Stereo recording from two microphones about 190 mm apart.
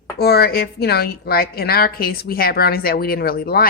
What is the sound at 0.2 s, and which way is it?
A woman's voice, 55° left (ahead or behind).